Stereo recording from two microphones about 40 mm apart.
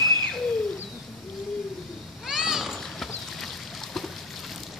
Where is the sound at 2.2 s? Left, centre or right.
Centre.